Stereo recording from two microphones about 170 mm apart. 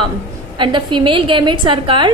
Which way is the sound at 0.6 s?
25° right (ahead or behind).